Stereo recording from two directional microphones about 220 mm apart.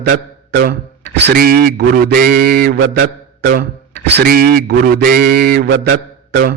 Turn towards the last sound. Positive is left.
turn(degrees=-45)  # may be behind; listen again after turning